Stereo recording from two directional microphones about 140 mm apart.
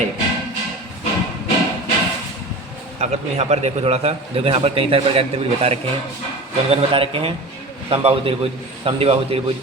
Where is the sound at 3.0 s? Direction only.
50° right (ahead or behind).